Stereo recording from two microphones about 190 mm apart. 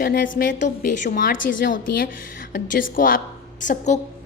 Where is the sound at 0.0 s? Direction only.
50° left (ahead or behind).